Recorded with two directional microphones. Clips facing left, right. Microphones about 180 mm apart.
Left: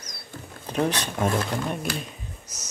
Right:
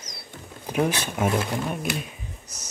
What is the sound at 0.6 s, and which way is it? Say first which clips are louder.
Speech: right 1 dB; 10° right (ahead or behind).